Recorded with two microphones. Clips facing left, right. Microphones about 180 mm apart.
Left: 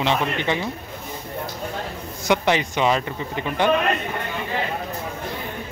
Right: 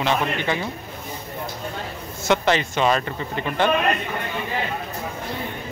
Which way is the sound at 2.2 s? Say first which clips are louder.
Even; 15° left (ahead or behind).